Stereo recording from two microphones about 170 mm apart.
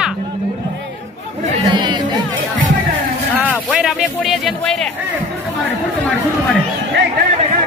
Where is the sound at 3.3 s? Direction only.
10° right (ahead or behind).